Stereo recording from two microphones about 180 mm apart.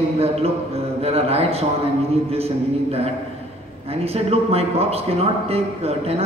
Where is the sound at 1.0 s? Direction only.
35° right (ahead or behind).